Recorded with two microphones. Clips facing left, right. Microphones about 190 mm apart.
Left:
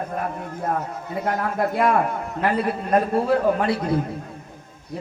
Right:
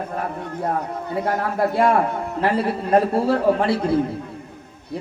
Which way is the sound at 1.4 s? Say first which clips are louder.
Right 2 dB; 30° right (ahead or behind).